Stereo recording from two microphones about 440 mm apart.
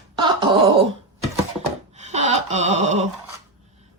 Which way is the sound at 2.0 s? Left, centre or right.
Centre.